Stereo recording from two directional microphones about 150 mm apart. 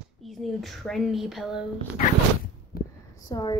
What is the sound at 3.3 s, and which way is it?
Speech, 25° left (ahead or behind).